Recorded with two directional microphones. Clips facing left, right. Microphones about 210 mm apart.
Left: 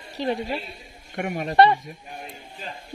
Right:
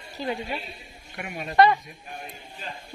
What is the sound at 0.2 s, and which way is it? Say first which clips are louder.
A woman's voice: left 4 dB; 35° left (ahead or behind).